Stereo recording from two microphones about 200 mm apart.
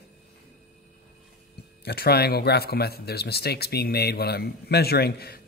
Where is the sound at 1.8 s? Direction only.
50° left (ahead or behind).